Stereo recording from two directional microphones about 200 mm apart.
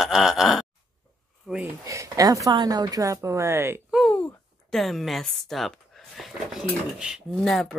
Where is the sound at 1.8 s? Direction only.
15° right (ahead or behind).